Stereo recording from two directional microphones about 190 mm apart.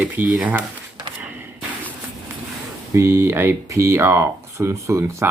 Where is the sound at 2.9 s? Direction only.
15° right (ahead or behind).